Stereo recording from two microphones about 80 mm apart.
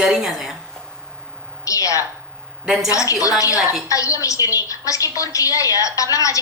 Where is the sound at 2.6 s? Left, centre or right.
Centre.